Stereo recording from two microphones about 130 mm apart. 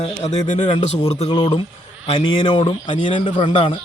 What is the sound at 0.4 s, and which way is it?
Speech, 70° left (ahead or behind).